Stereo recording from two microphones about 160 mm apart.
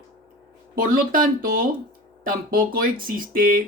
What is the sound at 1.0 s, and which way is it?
Speech, 60° right (ahead or behind).